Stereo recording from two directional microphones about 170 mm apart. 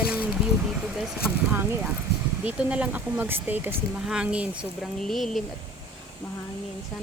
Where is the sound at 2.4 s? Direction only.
10° right (ahead or behind).